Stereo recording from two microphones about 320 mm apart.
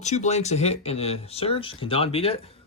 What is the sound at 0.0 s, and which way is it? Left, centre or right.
A man's voice, left.